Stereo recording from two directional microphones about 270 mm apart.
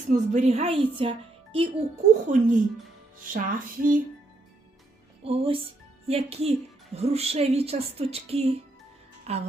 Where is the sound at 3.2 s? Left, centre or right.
Right.